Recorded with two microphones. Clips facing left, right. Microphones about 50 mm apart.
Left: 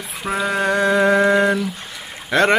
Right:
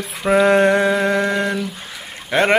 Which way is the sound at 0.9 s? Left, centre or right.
Centre.